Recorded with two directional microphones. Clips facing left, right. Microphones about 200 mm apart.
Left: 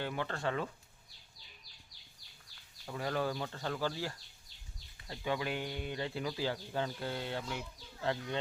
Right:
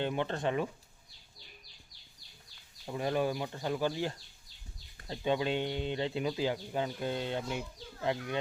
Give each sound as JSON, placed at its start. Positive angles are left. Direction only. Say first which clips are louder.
{"t": 0.0, "sound": "speech", "louder": "right 4 dB", "side_deg": -20}
{"t": 2.8, "sound": "speech", "louder": "right 4 dB", "side_deg": -20}